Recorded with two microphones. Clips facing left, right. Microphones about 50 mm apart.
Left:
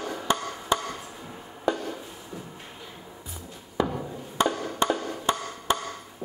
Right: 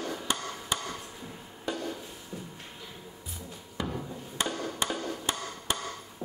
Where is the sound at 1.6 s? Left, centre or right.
Centre.